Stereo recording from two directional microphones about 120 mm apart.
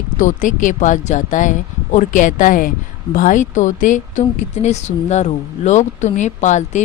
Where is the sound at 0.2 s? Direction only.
90° left.